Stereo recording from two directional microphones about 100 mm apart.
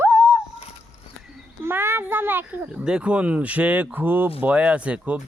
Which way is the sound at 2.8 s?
10° right (ahead or behind).